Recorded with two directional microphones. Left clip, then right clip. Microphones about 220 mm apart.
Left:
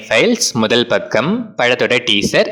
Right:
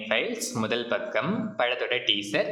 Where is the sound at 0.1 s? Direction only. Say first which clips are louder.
Left 15 dB; 45° left (ahead or behind).